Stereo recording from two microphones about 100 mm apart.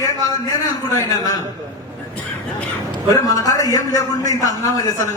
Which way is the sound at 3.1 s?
35° left (ahead or behind).